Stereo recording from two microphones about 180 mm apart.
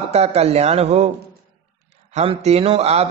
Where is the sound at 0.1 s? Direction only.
35° right (ahead or behind).